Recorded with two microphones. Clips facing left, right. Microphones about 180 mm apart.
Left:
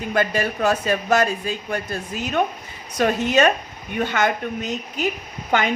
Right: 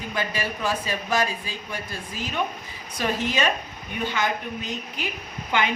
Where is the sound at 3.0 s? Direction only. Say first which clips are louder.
Left 7 dB; 50° left (ahead or behind).